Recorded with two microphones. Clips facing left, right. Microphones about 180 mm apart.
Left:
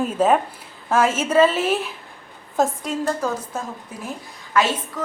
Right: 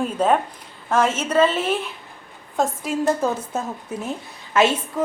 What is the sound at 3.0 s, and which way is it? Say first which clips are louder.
A woman's voice: right 4 dB; 20° right (ahead or behind).